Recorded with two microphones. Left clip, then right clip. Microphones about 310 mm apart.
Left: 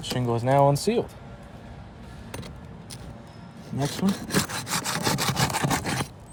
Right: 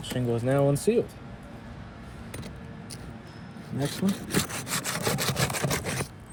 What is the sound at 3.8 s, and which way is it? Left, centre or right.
Sawing, centre.